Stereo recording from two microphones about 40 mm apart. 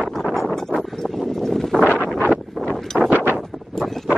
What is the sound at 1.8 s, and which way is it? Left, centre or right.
Wind noise, left.